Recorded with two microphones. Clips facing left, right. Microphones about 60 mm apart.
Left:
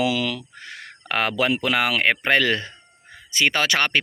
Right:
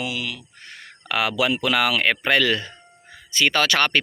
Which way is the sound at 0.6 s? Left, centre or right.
Left.